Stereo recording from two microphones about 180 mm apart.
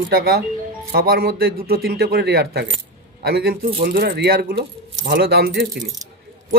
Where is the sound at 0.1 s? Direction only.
60° right (ahead or behind).